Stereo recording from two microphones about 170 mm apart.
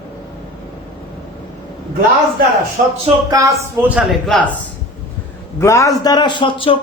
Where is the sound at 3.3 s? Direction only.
20° right (ahead or behind).